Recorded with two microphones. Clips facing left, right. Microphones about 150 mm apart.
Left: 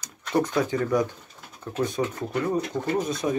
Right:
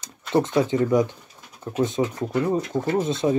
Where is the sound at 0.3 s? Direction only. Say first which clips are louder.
Right 3 dB; 25° right (ahead or behind).